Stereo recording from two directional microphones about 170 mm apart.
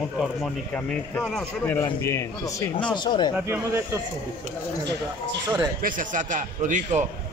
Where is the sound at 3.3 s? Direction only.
15° right (ahead or behind).